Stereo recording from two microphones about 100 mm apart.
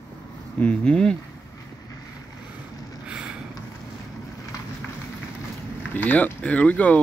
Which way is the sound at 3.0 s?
10° right (ahead or behind).